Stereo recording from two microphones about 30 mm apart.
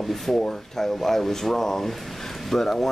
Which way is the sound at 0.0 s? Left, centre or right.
Centre.